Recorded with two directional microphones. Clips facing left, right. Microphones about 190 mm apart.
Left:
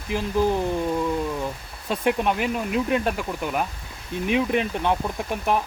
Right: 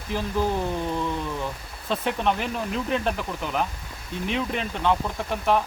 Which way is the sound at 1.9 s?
10° left (ahead or behind).